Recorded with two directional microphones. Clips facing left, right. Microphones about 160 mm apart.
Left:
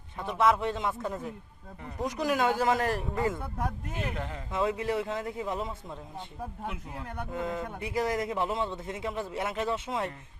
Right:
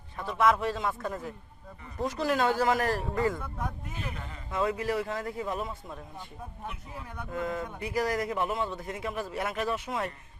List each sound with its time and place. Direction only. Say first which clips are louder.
0.2 s a man's voice: even; 20° left (ahead or behind)
3.8 s speech: left 5 dB; 70° left (ahead or behind)
4.5 s a man's voice: even; 20° left (ahead or behind)
6.7 s speech: left 3 dB; 65° left (ahead or behind)
7.3 s a man's voice: right 2 dB; 20° left (ahead or behind)